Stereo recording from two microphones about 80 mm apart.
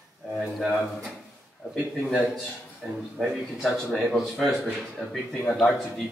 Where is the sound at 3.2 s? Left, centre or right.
Centre.